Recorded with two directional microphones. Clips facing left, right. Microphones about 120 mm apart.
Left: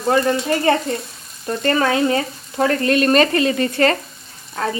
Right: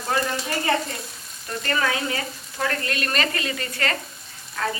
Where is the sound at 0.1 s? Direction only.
35° left (ahead or behind).